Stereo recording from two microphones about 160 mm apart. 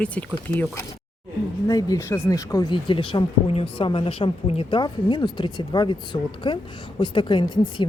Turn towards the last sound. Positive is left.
turn(degrees=30)  # may be behind; listen again after turning